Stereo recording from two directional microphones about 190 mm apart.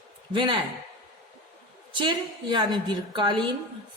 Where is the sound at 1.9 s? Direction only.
25° right (ahead or behind).